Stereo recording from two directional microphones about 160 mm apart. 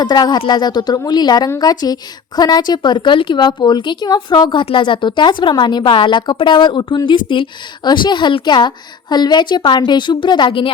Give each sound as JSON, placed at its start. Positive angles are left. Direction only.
{"t": 0.0, "sound": "a woman's voice", "side_deg": 25}